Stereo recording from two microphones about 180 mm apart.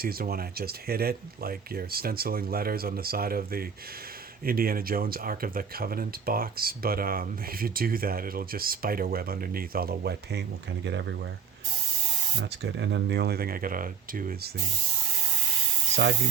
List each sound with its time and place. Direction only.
0.0 s speech: 55° right (ahead or behind); by 11.3 s 75° right (ahead or behind)
12.4 s speech: 80° right; by 14.5 s 50° right (ahead or behind)